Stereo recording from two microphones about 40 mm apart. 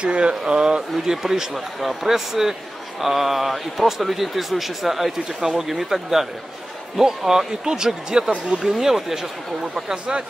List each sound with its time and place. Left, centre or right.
0.0 s a man's voice: right; by 9.2 s centre